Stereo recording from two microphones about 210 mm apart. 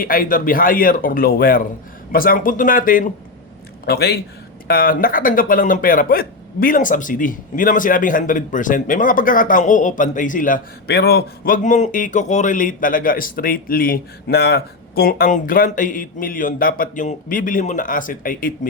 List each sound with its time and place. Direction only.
0.0 s speech: 40° left (ahead or behind)